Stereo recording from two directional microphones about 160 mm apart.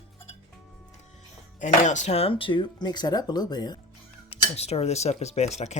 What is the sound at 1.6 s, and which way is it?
Speech, 50° left (ahead or behind).